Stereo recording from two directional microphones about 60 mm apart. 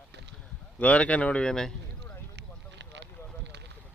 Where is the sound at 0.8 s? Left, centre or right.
Left.